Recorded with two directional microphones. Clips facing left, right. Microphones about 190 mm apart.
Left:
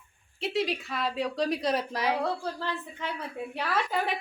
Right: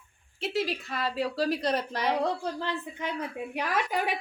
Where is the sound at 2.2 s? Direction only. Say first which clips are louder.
Right 2 dB; 15° right (ahead or behind).